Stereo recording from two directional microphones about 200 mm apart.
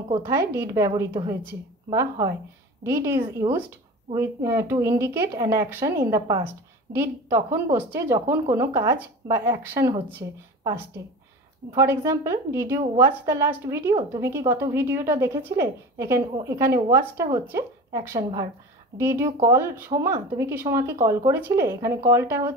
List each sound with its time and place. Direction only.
0.5 s speech: 15° right (ahead or behind)